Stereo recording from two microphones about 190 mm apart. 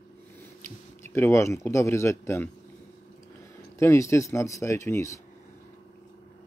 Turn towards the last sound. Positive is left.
turn(degrees=15)  # may be behind; listen again after turning